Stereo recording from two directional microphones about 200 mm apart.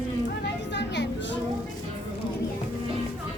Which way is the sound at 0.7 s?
60° left (ahead or behind).